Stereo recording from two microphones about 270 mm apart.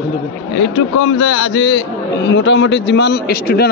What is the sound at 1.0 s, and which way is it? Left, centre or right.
A man's voice, left.